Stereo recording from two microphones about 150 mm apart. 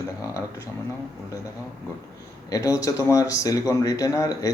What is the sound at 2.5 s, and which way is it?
Speech, 20° left (ahead or behind).